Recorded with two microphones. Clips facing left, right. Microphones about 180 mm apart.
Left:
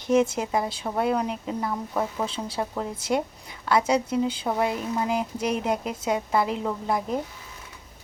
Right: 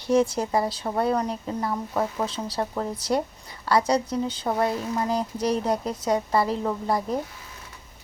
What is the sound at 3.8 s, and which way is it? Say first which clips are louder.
Speech: left 1 dB; 5° left (ahead or behind).